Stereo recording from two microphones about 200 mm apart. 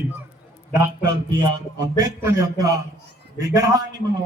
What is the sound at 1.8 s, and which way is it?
A man's voice, 15° right (ahead or behind).